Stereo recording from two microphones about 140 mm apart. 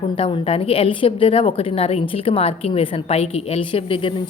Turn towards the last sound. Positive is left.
turn(degrees=40)  # may be behind; listen again after turning